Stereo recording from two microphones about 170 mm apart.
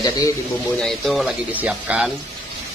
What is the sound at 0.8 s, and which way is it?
Speech, centre (ahead or behind).